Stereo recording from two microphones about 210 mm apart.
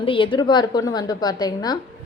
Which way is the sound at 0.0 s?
25° left (ahead or behind).